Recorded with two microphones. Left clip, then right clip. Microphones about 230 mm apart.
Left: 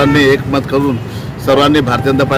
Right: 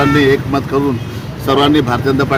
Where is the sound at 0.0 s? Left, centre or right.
Centre.